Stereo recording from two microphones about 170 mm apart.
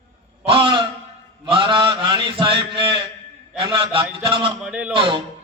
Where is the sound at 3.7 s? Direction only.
30° right (ahead or behind).